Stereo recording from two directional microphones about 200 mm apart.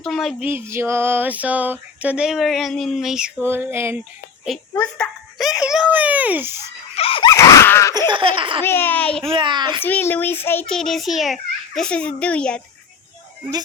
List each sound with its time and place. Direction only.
0.0 s a sound: centre (ahead or behind)
4.7 s a child's voice: 5° left (ahead or behind); by 6.6 s 10° right (ahead or behind)
6.9 s a sound: 30° left (ahead or behind); by 7.9 s 15° left (ahead or behind)
7.9 s laughter: 25° right (ahead or behind)
8.6 s a child's voice: 10° left (ahead or behind)
9.3 s laughter: 25° right (ahead or behind)
9.8 s a child's voice: 10° left (ahead or behind)